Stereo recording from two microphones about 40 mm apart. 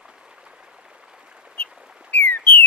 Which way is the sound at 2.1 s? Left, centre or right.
Left.